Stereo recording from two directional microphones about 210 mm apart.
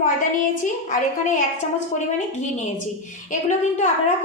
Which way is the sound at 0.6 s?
35° left (ahead or behind).